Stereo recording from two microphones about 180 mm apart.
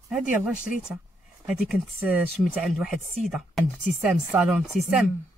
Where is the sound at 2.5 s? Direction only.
Centre (ahead or behind).